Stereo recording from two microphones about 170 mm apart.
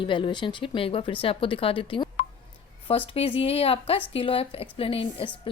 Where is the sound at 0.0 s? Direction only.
30° left (ahead or behind).